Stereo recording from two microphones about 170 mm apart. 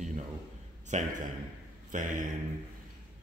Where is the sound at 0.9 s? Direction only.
45° right (ahead or behind).